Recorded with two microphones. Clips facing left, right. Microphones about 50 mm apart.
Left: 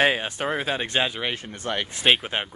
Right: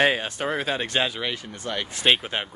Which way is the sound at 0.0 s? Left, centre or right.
Centre.